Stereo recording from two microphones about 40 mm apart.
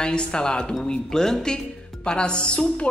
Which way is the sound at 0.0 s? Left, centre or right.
Left.